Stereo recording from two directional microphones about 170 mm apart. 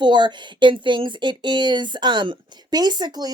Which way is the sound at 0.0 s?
25° right (ahead or behind).